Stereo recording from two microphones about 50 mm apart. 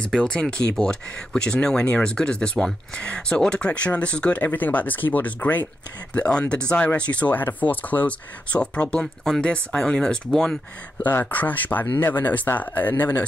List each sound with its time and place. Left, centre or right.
0.1 s speech: centre
4.6 s speech: left; by 10.6 s centre
11.0 s speech: left